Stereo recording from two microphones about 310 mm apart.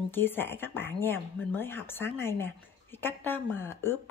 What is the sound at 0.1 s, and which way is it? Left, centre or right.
Speech, centre.